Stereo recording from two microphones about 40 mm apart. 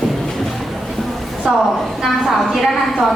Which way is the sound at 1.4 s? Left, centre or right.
Right.